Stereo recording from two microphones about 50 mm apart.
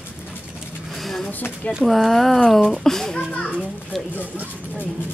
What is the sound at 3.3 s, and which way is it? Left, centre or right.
Children playing, centre.